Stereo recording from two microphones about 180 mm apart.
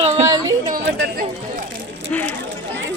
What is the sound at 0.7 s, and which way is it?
Chatter, 70° right (ahead or behind).